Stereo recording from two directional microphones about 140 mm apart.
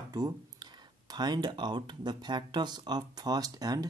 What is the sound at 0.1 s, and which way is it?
Speech, 30° right (ahead or behind).